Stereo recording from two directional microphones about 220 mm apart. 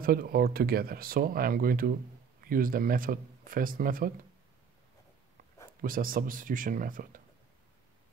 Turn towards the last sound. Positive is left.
turn(degrees=-40)  # may be behind; listen again after turning